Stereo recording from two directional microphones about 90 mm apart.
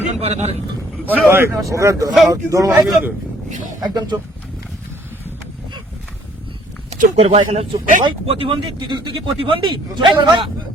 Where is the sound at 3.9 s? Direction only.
50° right (ahead or behind).